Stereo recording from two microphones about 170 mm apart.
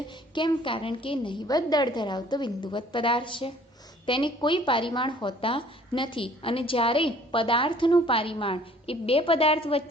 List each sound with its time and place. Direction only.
0.3 s a woman's voice: 30° left (ahead or behind)